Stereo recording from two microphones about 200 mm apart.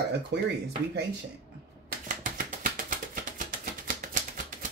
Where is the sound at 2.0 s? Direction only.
40° right (ahead or behind).